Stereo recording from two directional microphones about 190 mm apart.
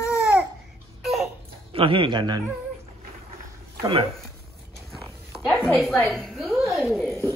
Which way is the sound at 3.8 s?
25° right (ahead or behind).